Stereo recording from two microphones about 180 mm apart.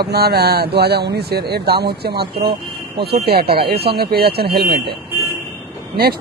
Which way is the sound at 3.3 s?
60° right (ahead or behind).